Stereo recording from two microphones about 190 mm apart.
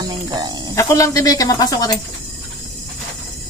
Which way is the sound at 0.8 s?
15° left (ahead or behind).